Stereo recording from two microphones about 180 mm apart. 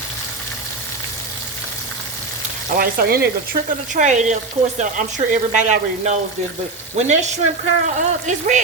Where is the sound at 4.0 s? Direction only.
40° right (ahead or behind).